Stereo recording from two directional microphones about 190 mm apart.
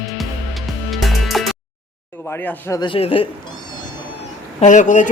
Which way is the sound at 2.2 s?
10° left (ahead or behind).